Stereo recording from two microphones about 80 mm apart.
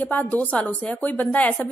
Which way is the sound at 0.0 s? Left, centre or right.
Left.